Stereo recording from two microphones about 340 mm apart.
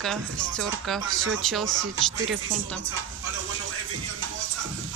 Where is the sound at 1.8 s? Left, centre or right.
Right.